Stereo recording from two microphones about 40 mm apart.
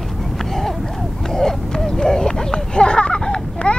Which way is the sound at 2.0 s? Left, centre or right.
Centre.